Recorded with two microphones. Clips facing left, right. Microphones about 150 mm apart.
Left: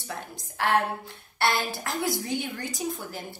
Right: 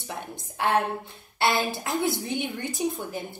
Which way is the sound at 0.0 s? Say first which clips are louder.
Right 1 dB; 20° right (ahead or behind).